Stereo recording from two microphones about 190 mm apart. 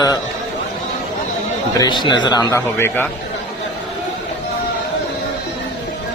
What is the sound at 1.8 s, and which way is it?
Mantra, 25° left (ahead or behind).